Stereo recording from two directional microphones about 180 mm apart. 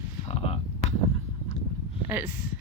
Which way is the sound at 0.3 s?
35° left (ahead or behind).